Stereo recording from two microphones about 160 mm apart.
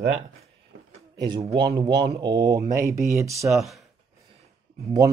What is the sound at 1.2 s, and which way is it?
Speech, 25° right (ahead or behind).